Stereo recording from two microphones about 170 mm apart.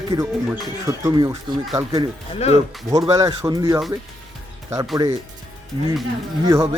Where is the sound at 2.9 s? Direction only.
20° right (ahead or behind).